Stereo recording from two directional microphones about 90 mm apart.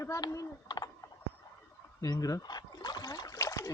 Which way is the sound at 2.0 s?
40° left (ahead or behind).